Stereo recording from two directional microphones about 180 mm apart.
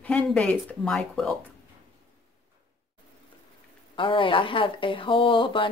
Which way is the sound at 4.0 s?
30° left (ahead or behind).